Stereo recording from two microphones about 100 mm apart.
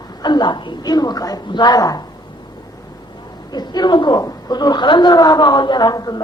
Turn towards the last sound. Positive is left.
turn(degrees=40)  # may be behind; listen again after turning